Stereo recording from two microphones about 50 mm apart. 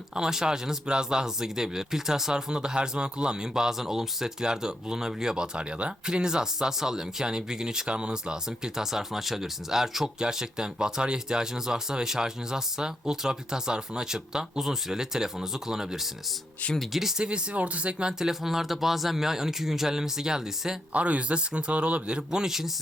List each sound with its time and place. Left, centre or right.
0.1 s speech: centre
17.2 s speech: right
18.2 s speech: centre
20.9 s speech: right; by 22.7 s centre